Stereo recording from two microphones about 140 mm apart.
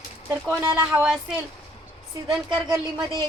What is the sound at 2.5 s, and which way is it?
Speech, 30° right (ahead or behind).